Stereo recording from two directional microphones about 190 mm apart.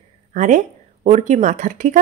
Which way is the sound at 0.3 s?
40° right (ahead or behind).